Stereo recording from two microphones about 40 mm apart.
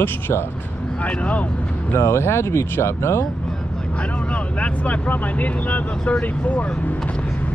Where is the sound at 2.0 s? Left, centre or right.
Left.